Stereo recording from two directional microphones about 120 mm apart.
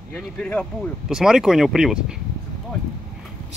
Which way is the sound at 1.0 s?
5° right (ahead or behind).